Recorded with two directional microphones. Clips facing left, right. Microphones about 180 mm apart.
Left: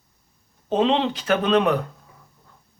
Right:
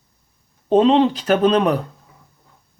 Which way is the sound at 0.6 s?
40° right (ahead or behind).